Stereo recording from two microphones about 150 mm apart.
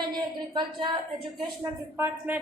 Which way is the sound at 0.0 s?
30° right (ahead or behind).